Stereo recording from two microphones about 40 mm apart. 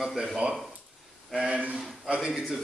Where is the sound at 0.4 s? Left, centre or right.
Right.